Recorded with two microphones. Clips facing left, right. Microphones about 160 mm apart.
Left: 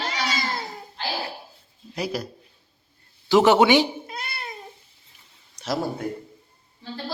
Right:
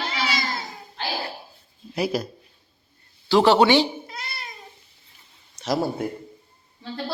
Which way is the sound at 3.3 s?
15° left (ahead or behind).